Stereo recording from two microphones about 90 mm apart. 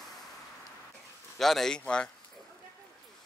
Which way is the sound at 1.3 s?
Centre (ahead or behind).